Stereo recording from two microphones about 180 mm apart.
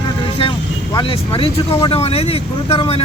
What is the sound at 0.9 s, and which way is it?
Speech, 30° left (ahead or behind).